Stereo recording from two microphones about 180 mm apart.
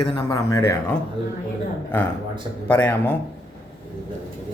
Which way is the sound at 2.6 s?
10° left (ahead or behind).